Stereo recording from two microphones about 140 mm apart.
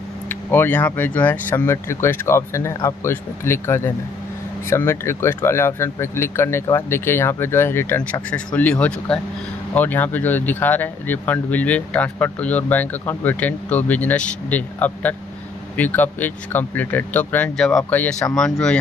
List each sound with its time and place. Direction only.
0.3 s speech: 15° left (ahead or behind)